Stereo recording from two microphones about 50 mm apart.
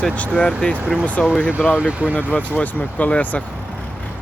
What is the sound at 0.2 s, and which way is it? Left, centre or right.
Speech, left.